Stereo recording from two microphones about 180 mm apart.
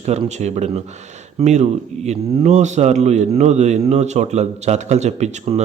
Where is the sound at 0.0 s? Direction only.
40° right (ahead or behind).